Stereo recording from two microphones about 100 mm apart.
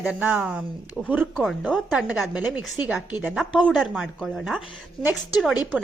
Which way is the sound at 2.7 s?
15° right (ahead or behind).